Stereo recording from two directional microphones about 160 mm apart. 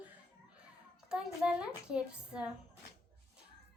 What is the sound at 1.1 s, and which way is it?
A woman's voice, 5° right (ahead or behind).